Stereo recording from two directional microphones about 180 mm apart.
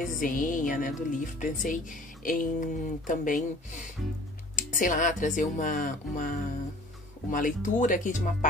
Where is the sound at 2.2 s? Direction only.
50° left (ahead or behind).